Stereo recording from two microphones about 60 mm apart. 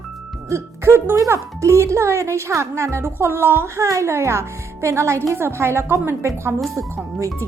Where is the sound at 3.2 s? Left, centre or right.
Right.